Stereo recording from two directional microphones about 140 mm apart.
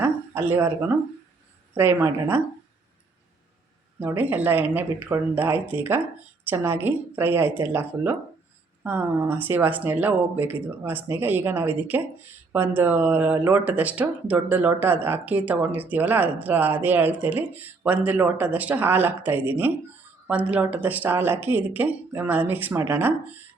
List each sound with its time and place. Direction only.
0.0 s a sound: 15° right (ahead or behind)
1.7 s speech: 15° right (ahead or behind)
4.0 s speech: 15° right (ahead or behind)